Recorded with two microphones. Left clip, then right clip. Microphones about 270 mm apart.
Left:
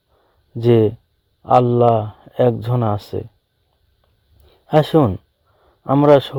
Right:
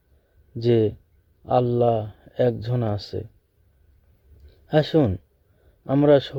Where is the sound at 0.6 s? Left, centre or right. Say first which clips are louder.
Left 6 dB; centre.